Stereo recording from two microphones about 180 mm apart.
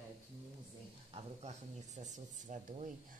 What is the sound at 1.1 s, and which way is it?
Speech, 35° right (ahead or behind).